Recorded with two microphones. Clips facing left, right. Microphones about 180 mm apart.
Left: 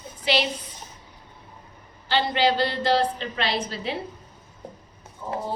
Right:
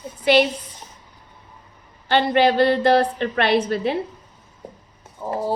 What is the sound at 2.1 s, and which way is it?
A woman's voice, 55° right (ahead or behind).